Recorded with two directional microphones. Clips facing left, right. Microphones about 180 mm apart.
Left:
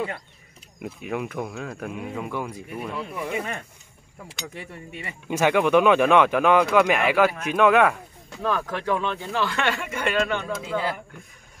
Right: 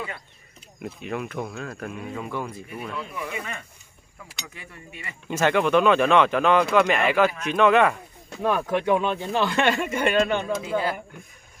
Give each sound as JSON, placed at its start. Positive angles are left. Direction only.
{"t": 0.8, "sound": "speech", "side_deg": 10}
{"t": 3.3, "sound": "speech", "side_deg": 40}
{"t": 5.3, "sound": "speech", "side_deg": 10}
{"t": 8.6, "sound": "speech", "side_deg": -20}